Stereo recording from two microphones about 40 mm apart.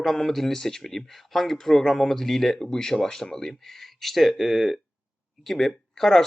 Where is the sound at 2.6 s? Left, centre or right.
Centre.